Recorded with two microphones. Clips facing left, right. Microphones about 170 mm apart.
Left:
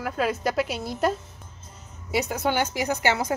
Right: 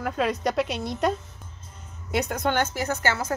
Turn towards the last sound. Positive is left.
turn(degrees=15)  # may be behind; listen again after turning